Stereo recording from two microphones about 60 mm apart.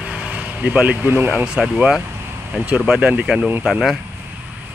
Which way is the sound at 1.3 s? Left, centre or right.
Centre.